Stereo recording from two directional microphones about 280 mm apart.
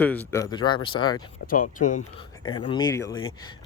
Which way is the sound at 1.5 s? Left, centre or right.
Left.